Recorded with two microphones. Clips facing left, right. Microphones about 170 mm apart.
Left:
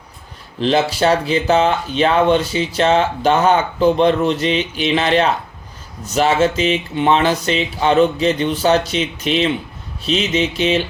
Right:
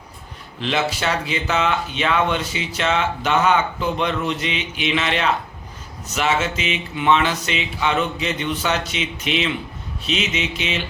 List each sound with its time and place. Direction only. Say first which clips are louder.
0.6 s speech: left 7 dB; 35° left (ahead or behind)